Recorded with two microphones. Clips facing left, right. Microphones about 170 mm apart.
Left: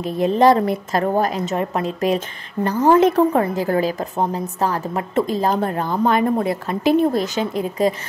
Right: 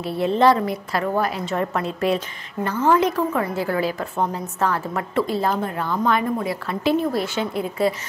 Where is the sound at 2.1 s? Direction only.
40° left (ahead or behind).